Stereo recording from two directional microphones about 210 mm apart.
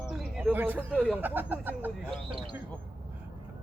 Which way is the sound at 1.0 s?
10° right (ahead or behind).